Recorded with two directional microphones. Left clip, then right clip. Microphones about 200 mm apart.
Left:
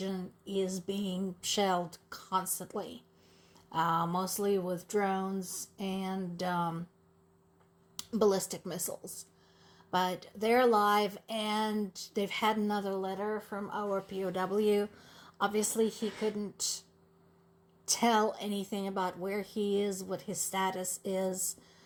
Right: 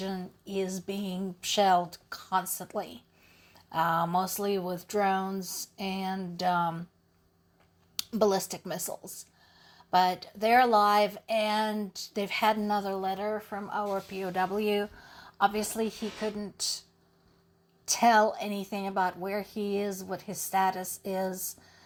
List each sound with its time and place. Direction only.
0.4 s speech: 15° right (ahead or behind)
7.9 s a woman's voice: 15° right (ahead or behind)
17.8 s speech: 15° right (ahead or behind)